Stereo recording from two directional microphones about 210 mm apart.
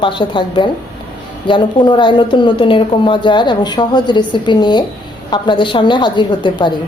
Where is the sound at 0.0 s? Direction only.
25° left (ahead or behind).